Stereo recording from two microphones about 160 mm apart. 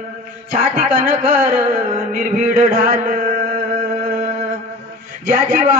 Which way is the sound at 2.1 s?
55° right (ahead or behind).